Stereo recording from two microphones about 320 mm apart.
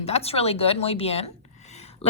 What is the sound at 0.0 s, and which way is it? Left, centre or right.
A woman's voice, centre.